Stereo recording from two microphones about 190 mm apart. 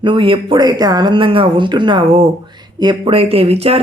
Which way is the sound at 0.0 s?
25° right (ahead or behind).